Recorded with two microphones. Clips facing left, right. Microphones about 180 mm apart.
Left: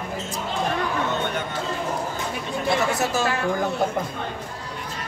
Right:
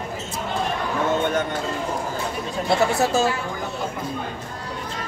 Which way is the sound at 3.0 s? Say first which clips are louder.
Right 4 dB; 25° right (ahead or behind).